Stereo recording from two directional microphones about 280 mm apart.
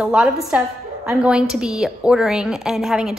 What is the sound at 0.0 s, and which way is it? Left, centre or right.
A woman's voice, centre.